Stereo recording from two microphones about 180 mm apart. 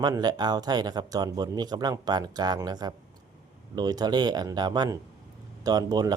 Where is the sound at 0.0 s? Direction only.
25° right (ahead or behind).